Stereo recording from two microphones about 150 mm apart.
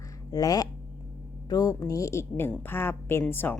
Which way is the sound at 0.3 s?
25° left (ahead or behind).